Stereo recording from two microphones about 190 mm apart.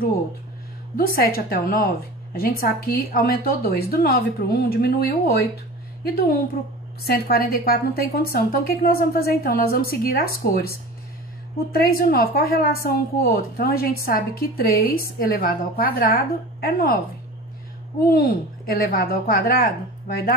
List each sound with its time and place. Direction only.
0.9 s a woman's voice: 50° left (ahead or behind)
7.0 s a woman's voice: 55° left (ahead or behind)
18.0 s a woman's voice: 50° left (ahead or behind)